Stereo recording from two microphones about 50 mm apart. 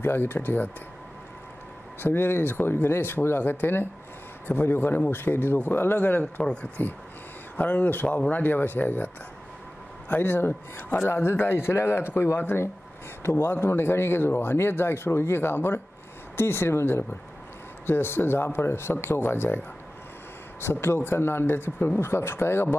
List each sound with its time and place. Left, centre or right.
0.0 s speech: left
2.0 s speech: left
13.2 s speech: left
20.6 s speech: left